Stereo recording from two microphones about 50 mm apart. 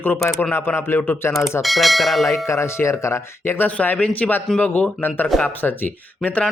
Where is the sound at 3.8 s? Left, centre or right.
Left.